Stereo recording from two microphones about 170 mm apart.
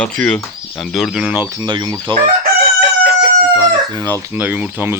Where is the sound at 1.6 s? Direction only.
25° right (ahead or behind).